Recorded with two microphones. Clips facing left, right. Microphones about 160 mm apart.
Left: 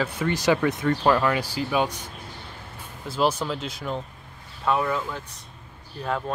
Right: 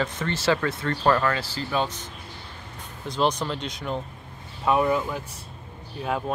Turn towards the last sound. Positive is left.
turn(degrees=-10)  # may be behind; listen again after turning